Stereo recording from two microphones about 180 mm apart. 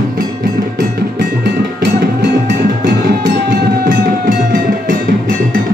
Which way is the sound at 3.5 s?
50° right (ahead or behind).